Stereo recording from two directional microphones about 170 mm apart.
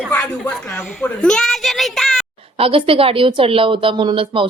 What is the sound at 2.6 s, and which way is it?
A woman's voice, 35° right (ahead or behind).